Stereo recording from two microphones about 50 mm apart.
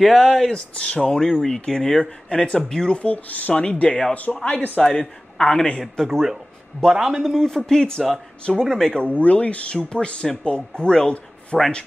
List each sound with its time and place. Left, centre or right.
0.0 s speech: centre
0.5 s speech: centre
6.9 s speech: centre
7.3 s speech: centre
9.1 s speech: left